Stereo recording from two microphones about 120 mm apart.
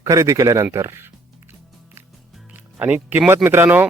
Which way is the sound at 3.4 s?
20° right (ahead or behind).